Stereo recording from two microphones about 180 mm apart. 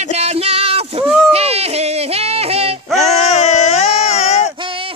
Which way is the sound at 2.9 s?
40° left (ahead or behind).